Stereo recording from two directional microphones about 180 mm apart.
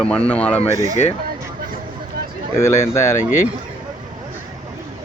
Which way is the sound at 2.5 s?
15° left (ahead or behind).